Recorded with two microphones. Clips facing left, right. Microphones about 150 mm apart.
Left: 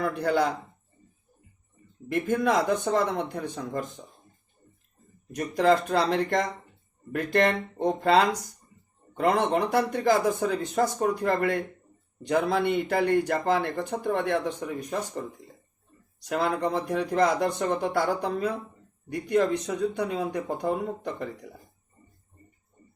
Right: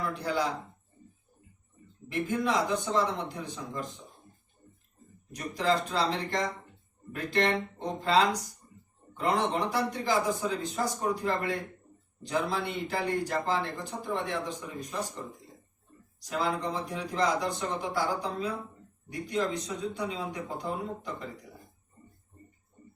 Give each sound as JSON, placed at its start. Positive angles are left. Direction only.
{"t": 0.0, "sound": "speech", "side_deg": 60}
{"t": 2.0, "sound": "speech", "side_deg": 50}
{"t": 5.3, "sound": "speech", "side_deg": 55}
{"t": 16.3, "sound": "speech", "side_deg": 60}